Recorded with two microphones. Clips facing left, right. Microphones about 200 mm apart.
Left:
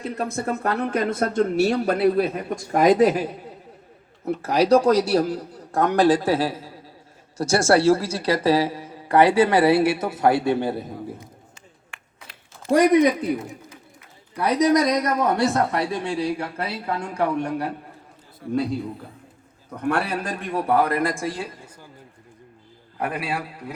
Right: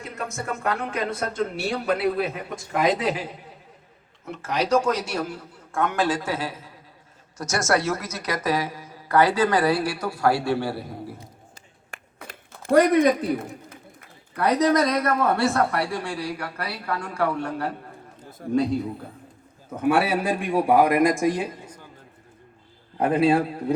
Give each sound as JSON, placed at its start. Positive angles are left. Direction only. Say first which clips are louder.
{"t": 0.0, "sound": "speech", "louder": "left 6 dB", "side_deg": 35}
{"t": 4.3, "sound": "a man's voice", "louder": "left 6 dB", "side_deg": 35}
{"t": 11.9, "sound": "a sound", "louder": "right 8 dB", "side_deg": -50}
{"t": 14.3, "sound": "a woman's voice", "louder": "left 1 dB", "side_deg": 10}
{"t": 18.4, "sound": "a man's voice", "louder": "right 1 dB", "side_deg": -50}
{"t": 19.7, "sound": "a man's voice", "louder": "right 3 dB", "side_deg": -5}
{"t": 23.0, "sound": "a man's voice", "louder": "right 8 dB", "side_deg": -25}